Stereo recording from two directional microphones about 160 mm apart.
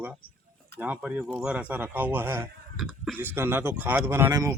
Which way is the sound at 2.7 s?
Centre (ahead or behind).